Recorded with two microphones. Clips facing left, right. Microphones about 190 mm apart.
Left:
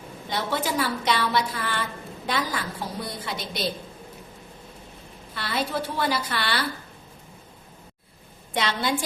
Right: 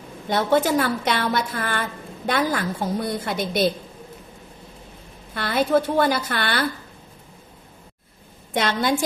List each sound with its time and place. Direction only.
0.3 s a woman's voice: 50° right (ahead or behind)
5.3 s a woman's voice: 50° right (ahead or behind)
8.5 s a woman's voice: 45° right (ahead or behind)